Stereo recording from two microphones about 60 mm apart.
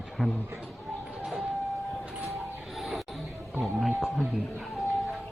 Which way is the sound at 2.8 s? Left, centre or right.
Centre.